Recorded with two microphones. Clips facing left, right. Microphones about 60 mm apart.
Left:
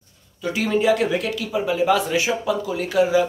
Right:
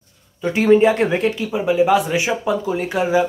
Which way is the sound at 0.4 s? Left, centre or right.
Right.